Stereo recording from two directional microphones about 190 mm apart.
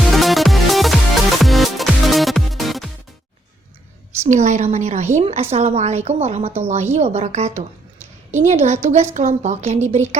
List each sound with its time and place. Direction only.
0.0 s music: centre (ahead or behind)
4.3 s a woman's voice: 40° right (ahead or behind)